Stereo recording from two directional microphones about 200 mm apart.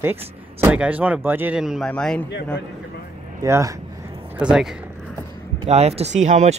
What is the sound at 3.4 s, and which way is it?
Speech, 15° right (ahead or behind).